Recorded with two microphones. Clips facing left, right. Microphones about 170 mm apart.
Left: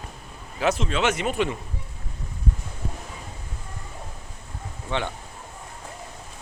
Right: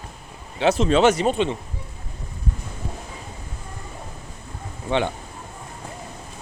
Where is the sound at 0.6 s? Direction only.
30° right (ahead or behind).